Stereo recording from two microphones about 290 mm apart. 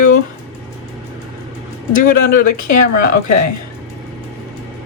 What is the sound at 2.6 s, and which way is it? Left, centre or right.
Speech, left.